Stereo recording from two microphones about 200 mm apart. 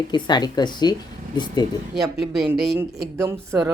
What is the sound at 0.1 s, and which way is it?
Speech, 20° left (ahead or behind).